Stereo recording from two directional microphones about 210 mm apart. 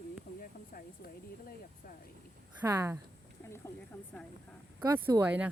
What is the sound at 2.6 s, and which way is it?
Speech, 15° right (ahead or behind).